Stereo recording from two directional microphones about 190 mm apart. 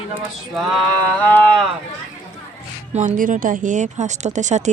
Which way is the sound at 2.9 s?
40° right (ahead or behind).